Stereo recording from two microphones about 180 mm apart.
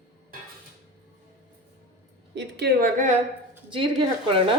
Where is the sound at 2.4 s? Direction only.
65° right (ahead or behind).